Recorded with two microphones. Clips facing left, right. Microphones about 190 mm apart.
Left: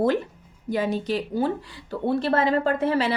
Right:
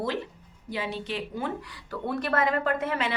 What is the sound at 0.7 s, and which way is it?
A woman's voice, 45° left (ahead or behind).